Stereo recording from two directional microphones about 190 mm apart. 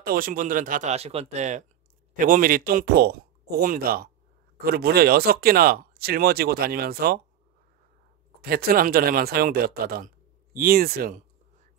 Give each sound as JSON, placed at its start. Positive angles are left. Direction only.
{"t": 0.0, "sound": "speech", "side_deg": -50}
{"t": 8.4, "sound": "speech", "side_deg": -55}